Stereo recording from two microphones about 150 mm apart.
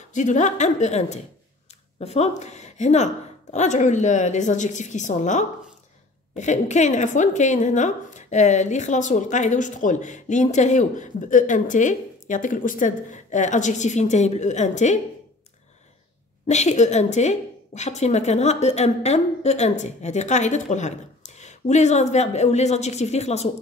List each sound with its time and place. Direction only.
0.1 s a woman's voice: 55° left (ahead or behind)
16.4 s a woman's voice: 50° left (ahead or behind)